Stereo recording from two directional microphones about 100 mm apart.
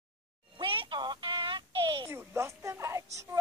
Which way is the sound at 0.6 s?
55° right (ahead or behind).